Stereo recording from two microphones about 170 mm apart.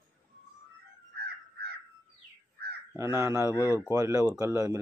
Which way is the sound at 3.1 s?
15° right (ahead or behind).